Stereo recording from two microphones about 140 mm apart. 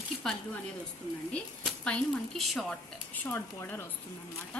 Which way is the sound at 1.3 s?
5° left (ahead or behind).